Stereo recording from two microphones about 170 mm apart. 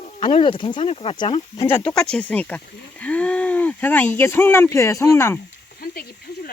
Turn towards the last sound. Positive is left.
turn(degrees=15)  # may be behind; listen again after turning